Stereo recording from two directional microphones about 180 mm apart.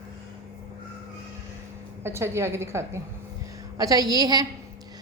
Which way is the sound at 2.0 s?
15° right (ahead or behind).